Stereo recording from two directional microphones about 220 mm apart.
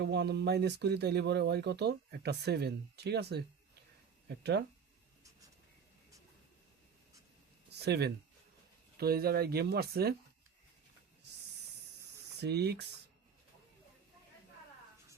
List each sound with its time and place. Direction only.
0.0 s speech: 50° right (ahead or behind)
7.7 s speech: 50° right (ahead or behind)
12.4 s speech: 50° right (ahead or behind)